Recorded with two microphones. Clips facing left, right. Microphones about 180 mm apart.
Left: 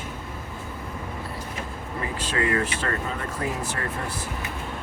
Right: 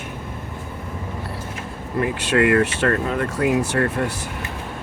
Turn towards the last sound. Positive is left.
turn(degrees=-75)  # may be behind; listen again after turning